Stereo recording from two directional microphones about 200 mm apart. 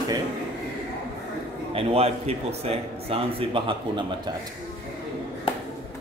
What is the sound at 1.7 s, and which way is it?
A man's voice, 30° right (ahead or behind).